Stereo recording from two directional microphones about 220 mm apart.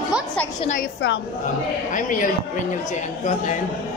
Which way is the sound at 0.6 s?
35° left (ahead or behind).